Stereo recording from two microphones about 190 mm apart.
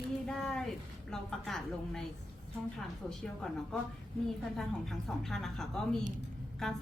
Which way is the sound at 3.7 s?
Centre (ahead or behind).